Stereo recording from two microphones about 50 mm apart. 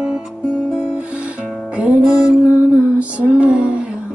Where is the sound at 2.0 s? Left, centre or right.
Centre.